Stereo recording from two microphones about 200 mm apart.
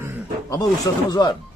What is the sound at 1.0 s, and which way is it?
Speech, 20° left (ahead or behind).